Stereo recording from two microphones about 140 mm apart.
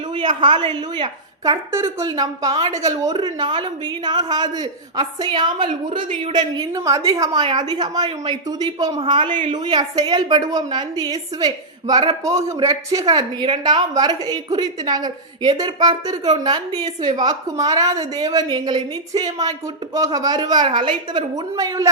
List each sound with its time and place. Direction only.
0.1 s a woman's voice: 35° right (ahead or behind)
12.2 s a woman's voice: 20° right (ahead or behind)